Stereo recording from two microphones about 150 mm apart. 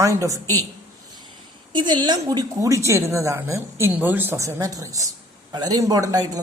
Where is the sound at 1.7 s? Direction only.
30° right (ahead or behind).